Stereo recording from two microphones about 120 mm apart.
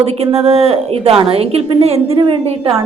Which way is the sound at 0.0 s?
55° right (ahead or behind).